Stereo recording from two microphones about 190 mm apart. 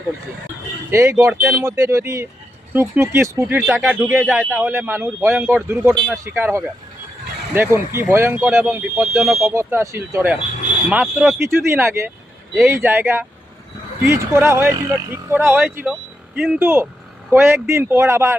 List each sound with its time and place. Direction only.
0.9 s a man's voice: 15° right (ahead or behind)
3.7 s speech: centre (ahead or behind)
4.3 s a man's voice: 10° right (ahead or behind)
11.3 s a man's voice: 15° right (ahead or behind)